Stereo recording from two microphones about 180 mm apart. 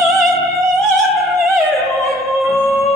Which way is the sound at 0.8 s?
Centre (ahead or behind).